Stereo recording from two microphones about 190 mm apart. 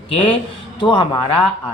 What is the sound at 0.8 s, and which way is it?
Speech, 25° left (ahead or behind).